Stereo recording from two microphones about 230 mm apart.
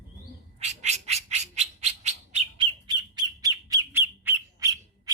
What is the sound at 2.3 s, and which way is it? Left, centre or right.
Bird, centre.